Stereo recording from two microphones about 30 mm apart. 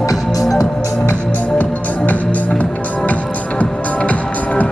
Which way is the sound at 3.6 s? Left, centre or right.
Left.